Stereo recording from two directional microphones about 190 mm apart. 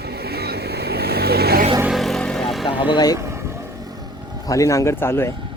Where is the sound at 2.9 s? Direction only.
20° left (ahead or behind).